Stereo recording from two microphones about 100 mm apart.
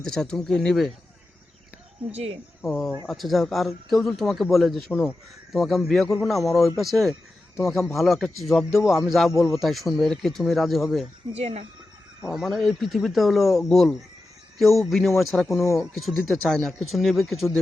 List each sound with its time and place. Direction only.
0.0 s a man's voice: 5° left (ahead or behind)
2.1 s speech: 90° right
2.6 s a man's voice: centre (ahead or behind)
4.9 s speech: 15° left (ahead or behind)
5.5 s a man's voice: centre (ahead or behind)
11.3 s speech: 90° right
12.3 s a man's voice: centre (ahead or behind)
15.6 s speech: 30° left (ahead or behind)
16.0 s a man's voice: centre (ahead or behind)